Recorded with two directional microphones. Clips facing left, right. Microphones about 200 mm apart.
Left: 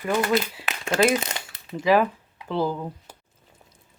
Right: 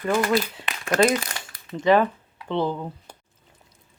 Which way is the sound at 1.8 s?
5° left (ahead or behind).